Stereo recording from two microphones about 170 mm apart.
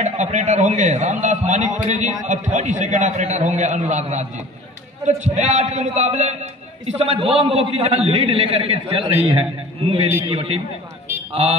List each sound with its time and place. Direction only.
0.0 s a man's voice: 45° right (ahead or behind)